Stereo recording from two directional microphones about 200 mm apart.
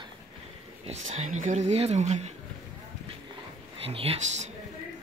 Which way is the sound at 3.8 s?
30° right (ahead or behind).